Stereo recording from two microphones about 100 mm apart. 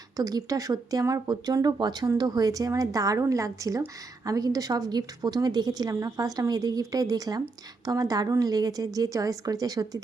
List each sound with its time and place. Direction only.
0.2 s speech: 35° right (ahead or behind)